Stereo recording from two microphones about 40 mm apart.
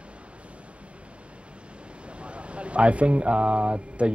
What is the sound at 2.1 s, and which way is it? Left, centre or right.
Speech, right.